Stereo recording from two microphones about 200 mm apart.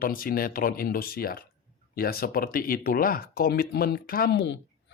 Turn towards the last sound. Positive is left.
turn(degrees=50)  # may be behind; listen again after turning